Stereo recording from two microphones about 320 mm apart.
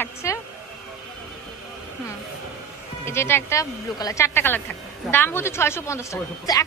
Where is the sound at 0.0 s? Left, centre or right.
Centre.